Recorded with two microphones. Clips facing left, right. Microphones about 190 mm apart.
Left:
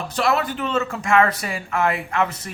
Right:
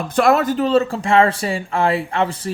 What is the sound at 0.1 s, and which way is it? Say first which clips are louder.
Speech: right 7 dB; 50° right (ahead or behind).